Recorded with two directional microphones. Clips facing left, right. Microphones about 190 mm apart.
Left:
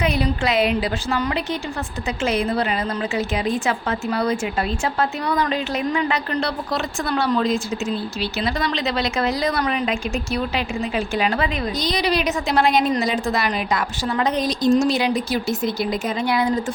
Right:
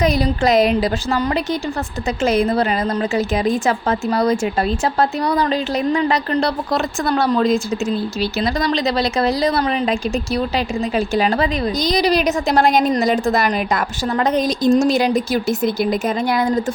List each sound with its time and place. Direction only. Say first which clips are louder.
0.0 s a woman's voice: right 4 dB; 40° right (ahead or behind)
10.9 s a woman's voice: right 5 dB; 35° right (ahead or behind)